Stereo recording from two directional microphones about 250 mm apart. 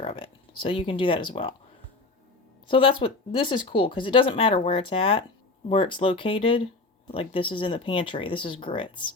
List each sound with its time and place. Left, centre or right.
0.0 s speech: left
2.6 s speech: left